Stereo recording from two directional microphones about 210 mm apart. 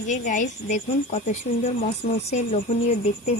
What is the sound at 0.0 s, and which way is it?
A woman's voice, 35° left (ahead or behind).